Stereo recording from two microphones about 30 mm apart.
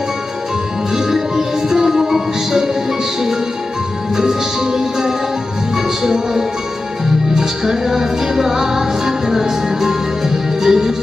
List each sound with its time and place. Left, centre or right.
0.9 s music: centre